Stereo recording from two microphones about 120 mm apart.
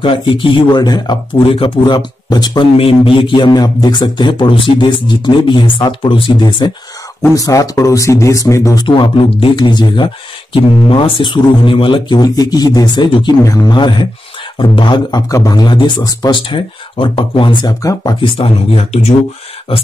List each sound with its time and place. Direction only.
0.0 s speech: 45° left (ahead or behind)
7.2 s speech: 30° left (ahead or behind)
8.8 s speech: 45° left (ahead or behind)
13.4 s speech: 25° left (ahead or behind)
13.7 s speech: 40° left (ahead or behind)
16.4 s speech: 45° left (ahead or behind)